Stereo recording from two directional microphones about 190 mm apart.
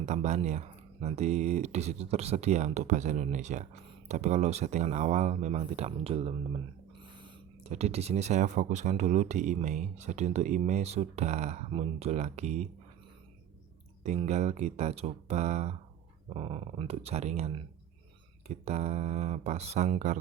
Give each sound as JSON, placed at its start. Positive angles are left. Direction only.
{"t": 0.0, "sound": "speech", "side_deg": -35}
{"t": 7.6, "sound": "speech", "side_deg": -35}
{"t": 14.0, "sound": "speech", "side_deg": -35}